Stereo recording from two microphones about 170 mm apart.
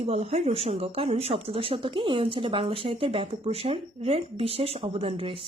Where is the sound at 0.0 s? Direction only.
40° right (ahead or behind).